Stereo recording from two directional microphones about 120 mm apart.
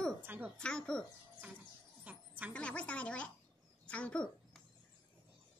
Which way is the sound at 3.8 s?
10° left (ahead or behind).